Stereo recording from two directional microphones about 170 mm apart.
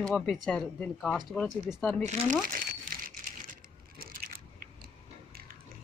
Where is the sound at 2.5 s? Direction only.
55° right (ahead or behind).